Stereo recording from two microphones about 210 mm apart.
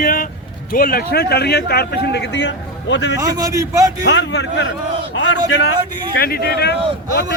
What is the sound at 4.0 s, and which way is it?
Speech, 55° left (ahead or behind).